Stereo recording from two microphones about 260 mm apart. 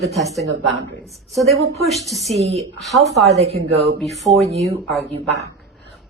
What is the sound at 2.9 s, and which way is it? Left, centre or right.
Speech, centre.